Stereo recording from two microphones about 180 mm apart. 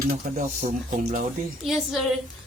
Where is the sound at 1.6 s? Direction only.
Centre (ahead or behind).